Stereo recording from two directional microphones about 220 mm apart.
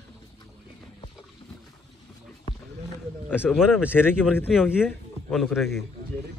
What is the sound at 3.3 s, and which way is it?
Speech, 5° right (ahead or behind).